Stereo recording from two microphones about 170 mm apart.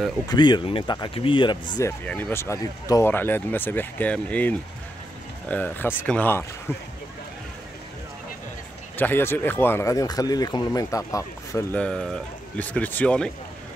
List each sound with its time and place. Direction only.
0.3 s speech: 25° left (ahead or behind)
2.0 s speech: 10° left (ahead or behind)
8.9 s speech: 10° left (ahead or behind)
11.8 s speech: 5° left (ahead or behind)